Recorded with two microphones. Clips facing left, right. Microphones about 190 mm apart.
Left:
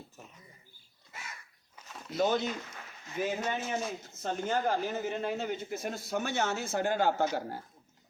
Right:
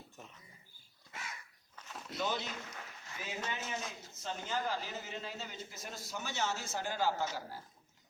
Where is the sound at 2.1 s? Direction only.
45° left (ahead or behind).